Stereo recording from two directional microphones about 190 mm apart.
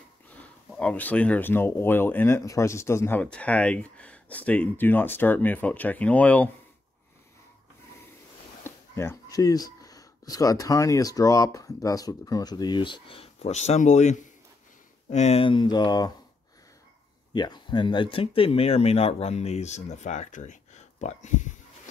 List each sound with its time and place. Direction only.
0.3 s speech: 5° left (ahead or behind)
8.6 s speech: 15° left (ahead or behind)
17.3 s speech: 25° left (ahead or behind); by 21.5 s 40° left (ahead or behind)